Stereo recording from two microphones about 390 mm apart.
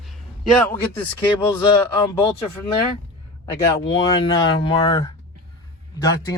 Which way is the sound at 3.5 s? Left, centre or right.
Centre.